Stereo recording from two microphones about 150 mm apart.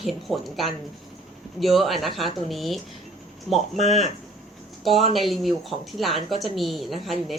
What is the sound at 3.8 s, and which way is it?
Speech, 50° left (ahead or behind).